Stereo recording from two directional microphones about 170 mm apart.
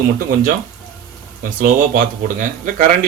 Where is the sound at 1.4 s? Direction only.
55° right (ahead or behind).